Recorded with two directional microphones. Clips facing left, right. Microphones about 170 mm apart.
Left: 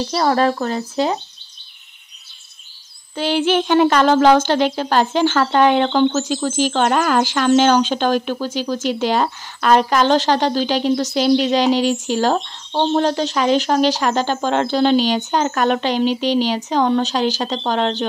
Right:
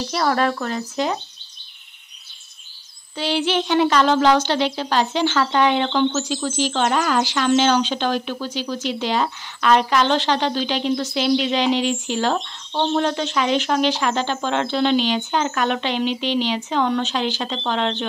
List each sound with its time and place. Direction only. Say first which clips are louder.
0.1 s speech: left 3 dB; 30° left (ahead or behind)
3.2 s speech: left 4 dB; 50° left (ahead or behind)